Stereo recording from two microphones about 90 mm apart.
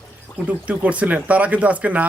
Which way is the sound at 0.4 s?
15° right (ahead or behind).